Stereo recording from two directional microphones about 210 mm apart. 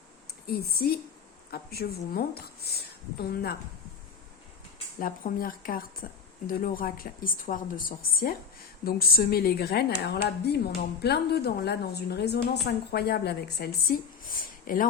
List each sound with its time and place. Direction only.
0.4 s a woman's voice: 45° left (ahead or behind)
4.9 s a woman's voice: 40° left (ahead or behind)